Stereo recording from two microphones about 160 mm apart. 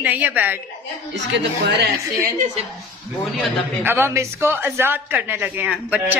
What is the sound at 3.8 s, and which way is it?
A man's voice, 15° right (ahead or behind).